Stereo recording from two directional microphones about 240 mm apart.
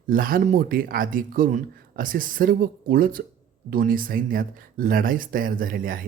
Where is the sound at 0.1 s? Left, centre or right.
Right.